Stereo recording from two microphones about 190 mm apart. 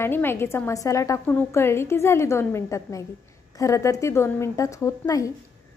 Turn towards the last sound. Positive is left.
turn(degrees=15)  # may be behind; listen again after turning